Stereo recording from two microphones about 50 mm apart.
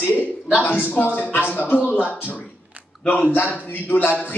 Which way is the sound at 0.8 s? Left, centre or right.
Left.